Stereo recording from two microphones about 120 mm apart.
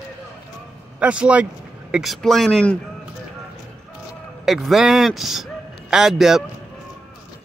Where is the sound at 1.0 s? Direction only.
10° right (ahead or behind); by 2.8 s 5° left (ahead or behind).